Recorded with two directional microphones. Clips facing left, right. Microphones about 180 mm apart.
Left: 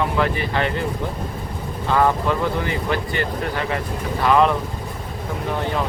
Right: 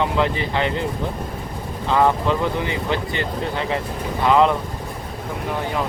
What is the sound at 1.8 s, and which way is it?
Speech, 20° right (ahead or behind).